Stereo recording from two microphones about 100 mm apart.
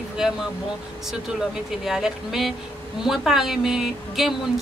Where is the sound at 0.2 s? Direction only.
5° right (ahead or behind).